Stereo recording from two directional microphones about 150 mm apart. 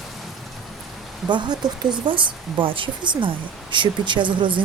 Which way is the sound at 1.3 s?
30° right (ahead or behind).